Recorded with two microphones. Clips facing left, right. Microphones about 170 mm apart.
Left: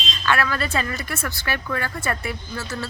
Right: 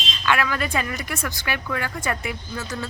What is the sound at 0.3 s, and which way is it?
Speech, 15° right (ahead or behind).